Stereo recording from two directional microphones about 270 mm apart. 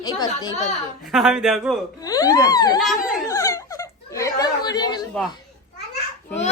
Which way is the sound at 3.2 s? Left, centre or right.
Centre.